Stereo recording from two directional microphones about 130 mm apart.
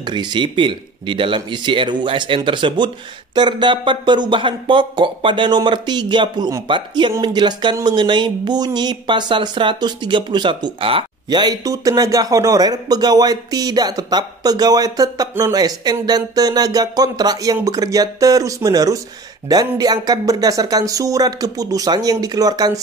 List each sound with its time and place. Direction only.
0.0 s speech: 35° right (ahead or behind)